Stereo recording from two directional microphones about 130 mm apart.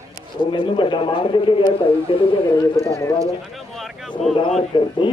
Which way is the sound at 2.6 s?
20° left (ahead or behind).